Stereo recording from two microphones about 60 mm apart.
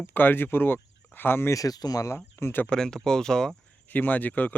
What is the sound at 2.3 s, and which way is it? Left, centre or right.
Speech, left.